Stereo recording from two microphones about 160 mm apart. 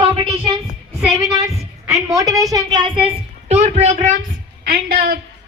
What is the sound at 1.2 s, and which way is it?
A woman's voice, 20° right (ahead or behind).